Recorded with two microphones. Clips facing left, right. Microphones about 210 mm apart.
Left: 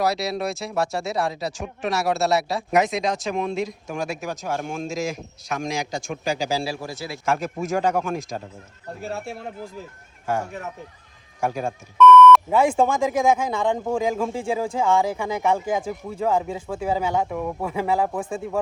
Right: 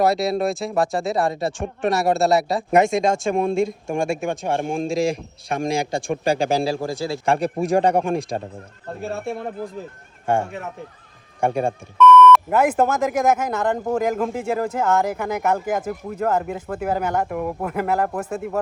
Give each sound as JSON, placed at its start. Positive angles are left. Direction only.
{"t": 0.0, "sound": "speech", "side_deg": 0}
{"t": 6.8, "sound": "speech", "side_deg": -50}
{"t": 7.3, "sound": "speech", "side_deg": 0}
{"t": 9.0, "sound": "speech", "side_deg": -55}
{"t": 11.9, "sound": "speech", "side_deg": 0}